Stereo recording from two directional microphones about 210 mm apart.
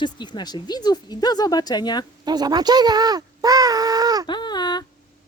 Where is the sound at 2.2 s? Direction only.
20° right (ahead or behind).